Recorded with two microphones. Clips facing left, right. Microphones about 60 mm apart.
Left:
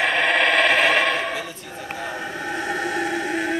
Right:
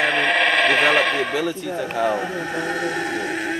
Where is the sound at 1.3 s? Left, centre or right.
Right.